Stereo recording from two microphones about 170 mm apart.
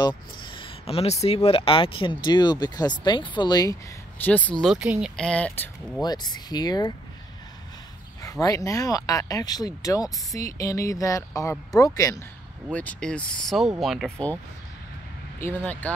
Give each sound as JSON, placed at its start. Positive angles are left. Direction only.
{"t": 0.0, "sound": "speech", "side_deg": 30}
{"t": 4.2, "sound": "speech", "side_deg": 10}
{"t": 5.1, "sound": "speech", "side_deg": 5}
{"t": 6.0, "sound": "speech", "side_deg": 25}
{"t": 8.2, "sound": "speech", "side_deg": 20}
{"t": 12.7, "sound": "speech", "side_deg": 5}
{"t": 15.3, "sound": "speech", "side_deg": 10}